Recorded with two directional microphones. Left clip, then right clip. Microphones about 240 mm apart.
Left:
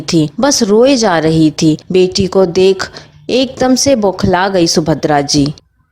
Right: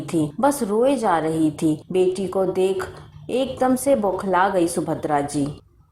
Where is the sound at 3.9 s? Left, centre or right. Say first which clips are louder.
Left 8 dB; left.